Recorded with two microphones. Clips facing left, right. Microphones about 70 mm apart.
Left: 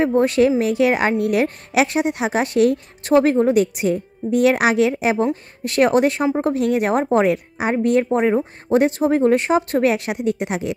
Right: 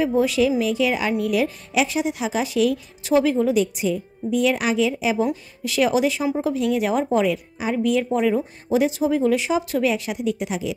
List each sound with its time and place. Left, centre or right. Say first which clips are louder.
0.0 s a woman's voice: left 3 dB; left
6.4 s a woman's voice: left 1 dB; left
7.7 s a woman's voice: left 3 dB; left